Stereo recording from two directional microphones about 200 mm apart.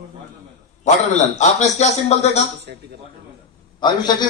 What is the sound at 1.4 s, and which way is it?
A man's voice, 35° left (ahead or behind).